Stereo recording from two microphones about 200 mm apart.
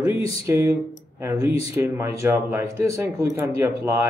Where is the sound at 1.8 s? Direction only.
15° right (ahead or behind).